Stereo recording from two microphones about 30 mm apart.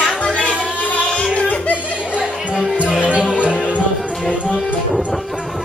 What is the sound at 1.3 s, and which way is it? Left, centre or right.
Music, left.